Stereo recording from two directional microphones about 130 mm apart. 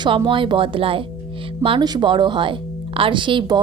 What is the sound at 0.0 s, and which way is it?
Speech, 40° right (ahead or behind).